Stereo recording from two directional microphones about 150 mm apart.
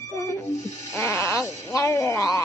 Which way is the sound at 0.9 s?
20° left (ahead or behind).